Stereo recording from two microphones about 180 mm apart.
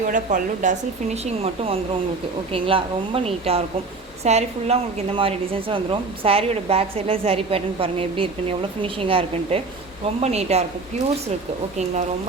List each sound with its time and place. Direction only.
0.1 s a woman's voice: 45° right (ahead or behind)
2.5 s a woman's voice: 30° right (ahead or behind)